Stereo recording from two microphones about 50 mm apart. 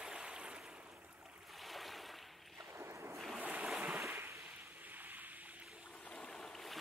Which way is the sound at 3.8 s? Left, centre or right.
Right.